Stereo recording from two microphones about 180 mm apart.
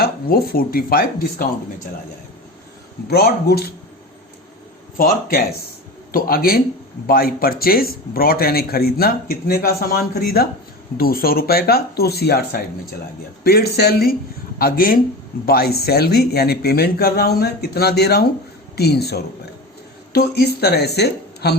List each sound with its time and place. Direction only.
0.0 s a man's voice: 55° left (ahead or behind)
3.1 s a man's voice: 60° left (ahead or behind)
4.9 s a man's voice: 55° left (ahead or behind)